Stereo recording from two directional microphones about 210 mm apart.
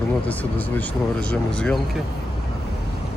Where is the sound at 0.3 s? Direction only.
10° left (ahead or behind).